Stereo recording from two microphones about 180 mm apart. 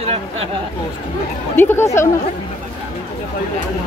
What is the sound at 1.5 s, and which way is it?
Speech, 10° left (ahead or behind).